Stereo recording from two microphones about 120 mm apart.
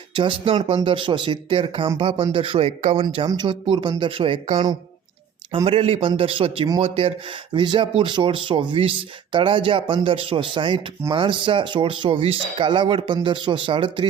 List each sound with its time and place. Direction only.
0.2 s speech: 40° right (ahead or behind)
5.6 s speech: 50° right (ahead or behind)
7.5 s speech: 40° right (ahead or behind)